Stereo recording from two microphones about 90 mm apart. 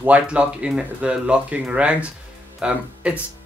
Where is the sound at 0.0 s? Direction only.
15° right (ahead or behind).